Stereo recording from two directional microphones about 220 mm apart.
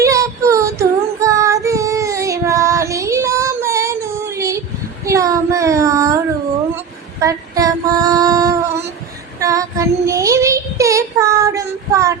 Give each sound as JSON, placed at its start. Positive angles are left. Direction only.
{"t": 0.0, "sound": "child singing", "side_deg": -15}
{"t": 6.7, "sound": "female singing", "side_deg": -15}
{"t": 9.4, "sound": "child singing", "side_deg": -15}